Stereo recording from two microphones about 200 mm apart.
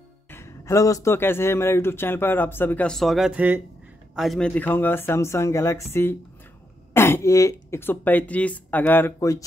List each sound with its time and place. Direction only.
0.3 s a man's voice: 15° left (ahead or behind)